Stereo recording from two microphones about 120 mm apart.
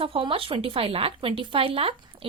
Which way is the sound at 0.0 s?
50° right (ahead or behind).